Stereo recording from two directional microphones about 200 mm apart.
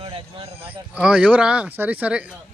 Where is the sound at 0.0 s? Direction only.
30° right (ahead or behind).